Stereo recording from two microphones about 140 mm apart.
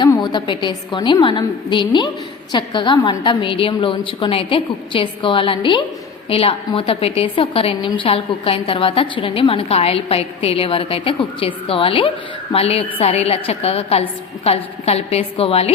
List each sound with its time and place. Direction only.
0.0 s a woman's voice: 30° left (ahead or behind); by 15.7 s 45° left (ahead or behind)